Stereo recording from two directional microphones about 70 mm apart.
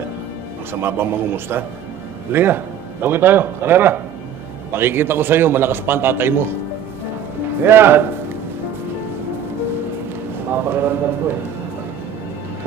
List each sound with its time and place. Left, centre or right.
0.7 s a man's voice: right
7.6 s a man's voice: right
10.5 s a man's voice: right